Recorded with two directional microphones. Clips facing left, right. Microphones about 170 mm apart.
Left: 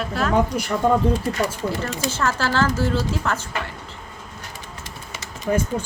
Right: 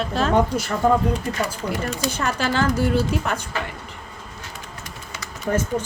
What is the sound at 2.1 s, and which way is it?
Speech, 15° right (ahead or behind).